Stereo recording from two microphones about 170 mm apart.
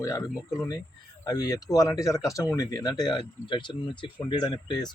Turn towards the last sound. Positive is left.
turn(degrees=25)  # may be behind; listen again after turning